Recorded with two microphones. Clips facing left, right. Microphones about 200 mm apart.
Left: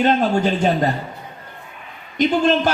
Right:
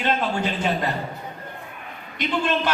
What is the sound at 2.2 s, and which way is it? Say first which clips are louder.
Speech: left 7 dB; 40° left (ahead or behind).